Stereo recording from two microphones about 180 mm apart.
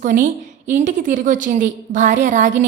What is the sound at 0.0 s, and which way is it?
A woman's voice, 45° right (ahead or behind).